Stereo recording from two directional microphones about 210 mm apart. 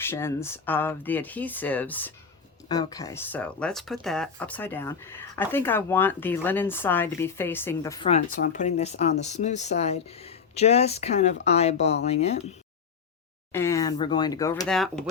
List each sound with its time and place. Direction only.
0.0 s speech: 10° left (ahead or behind)
2.6 s speech: 20° left (ahead or behind)
8.0 s speech: 35° left (ahead or behind)
13.5 s speech: 15° left (ahead or behind)
14.7 s speech: centre (ahead or behind)